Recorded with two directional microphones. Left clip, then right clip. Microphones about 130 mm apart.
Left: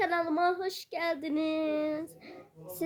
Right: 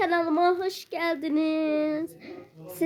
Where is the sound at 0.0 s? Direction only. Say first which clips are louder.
Right 5 dB; 20° left (ahead or behind).